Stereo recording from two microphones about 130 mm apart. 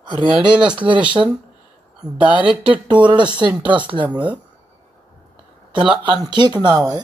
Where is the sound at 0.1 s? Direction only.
35° right (ahead or behind).